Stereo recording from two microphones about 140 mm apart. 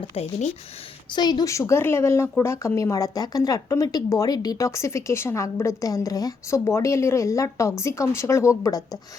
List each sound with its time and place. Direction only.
0.0 s a woman's voice: 40° left (ahead or behind)